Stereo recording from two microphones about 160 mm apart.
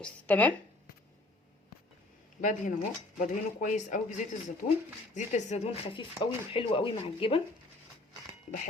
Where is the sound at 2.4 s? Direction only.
55° left (ahead or behind).